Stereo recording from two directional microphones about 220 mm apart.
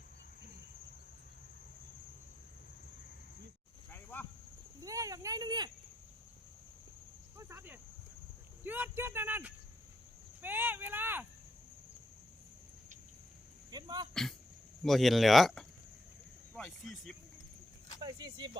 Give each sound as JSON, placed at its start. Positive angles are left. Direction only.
{"t": 3.9, "sound": "a sound", "side_deg": 10}
{"t": 4.8, "sound": "cricket", "side_deg": -15}
{"t": 7.3, "sound": "cricket", "side_deg": -10}
{"t": 8.6, "sound": "speech", "side_deg": -10}
{"t": 10.4, "sound": "a sound", "side_deg": -10}
{"t": 13.7, "sound": "cricket", "side_deg": -20}
{"t": 14.1, "sound": "speech", "side_deg": 0}
{"t": 18.0, "sound": "speech", "side_deg": -20}